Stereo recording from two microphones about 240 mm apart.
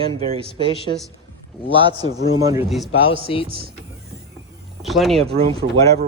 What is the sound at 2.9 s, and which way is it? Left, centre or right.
Speech, left.